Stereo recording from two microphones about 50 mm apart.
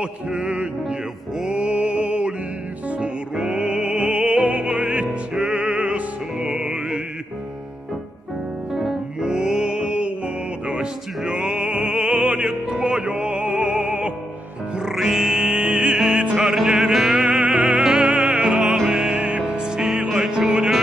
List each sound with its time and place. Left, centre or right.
0.0 s music: right
1.4 s mantra: right
3.3 s music: centre
8.7 s music: centre
9.2 s music: centre
14.9 s music: centre
15.3 s music: right
19.1 s music: right
19.4 s music: centre